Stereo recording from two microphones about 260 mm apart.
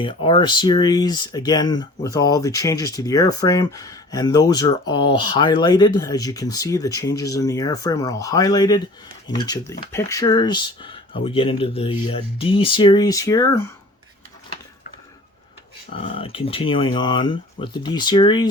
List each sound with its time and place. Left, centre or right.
0.0 s speech: centre
15.9 s speech: left